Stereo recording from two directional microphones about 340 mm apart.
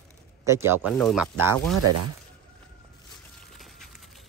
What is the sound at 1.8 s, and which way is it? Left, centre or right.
Speech, right.